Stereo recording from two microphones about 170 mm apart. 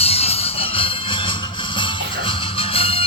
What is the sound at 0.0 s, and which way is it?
Music, 35° left (ahead or behind).